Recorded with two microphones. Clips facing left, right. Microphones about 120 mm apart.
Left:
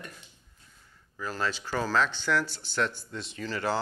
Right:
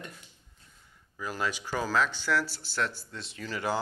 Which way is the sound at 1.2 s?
15° right (ahead or behind).